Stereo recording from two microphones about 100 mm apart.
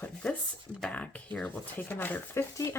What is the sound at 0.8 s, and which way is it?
Speech, 10° left (ahead or behind).